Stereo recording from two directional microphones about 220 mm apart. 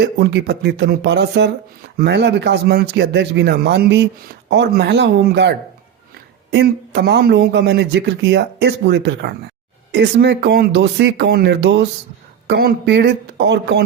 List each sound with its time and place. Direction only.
0.0 s speech: 45° right (ahead or behind)